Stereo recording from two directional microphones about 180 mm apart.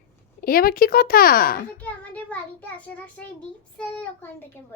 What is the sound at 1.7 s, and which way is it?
A child's voice, 10° left (ahead or behind).